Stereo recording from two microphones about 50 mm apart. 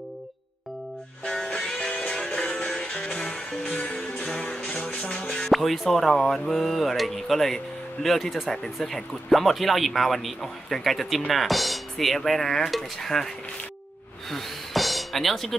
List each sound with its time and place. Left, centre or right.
1.2 s music: centre
5.5 s speech: centre
14.3 s a sound: centre